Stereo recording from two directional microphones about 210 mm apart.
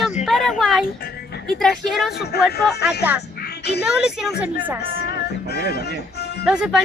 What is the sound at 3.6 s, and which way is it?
Speech, 50° left (ahead or behind).